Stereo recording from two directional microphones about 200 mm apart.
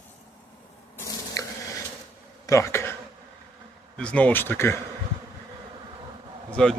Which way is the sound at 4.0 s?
5° left (ahead or behind).